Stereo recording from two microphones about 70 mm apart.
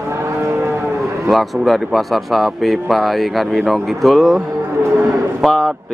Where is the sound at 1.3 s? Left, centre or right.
Centre.